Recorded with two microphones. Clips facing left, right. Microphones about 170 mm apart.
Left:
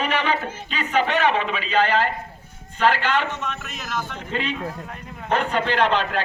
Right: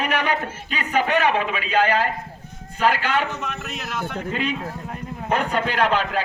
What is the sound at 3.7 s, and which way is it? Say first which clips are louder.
Speech: right 1 dB; 65° right (ahead or behind).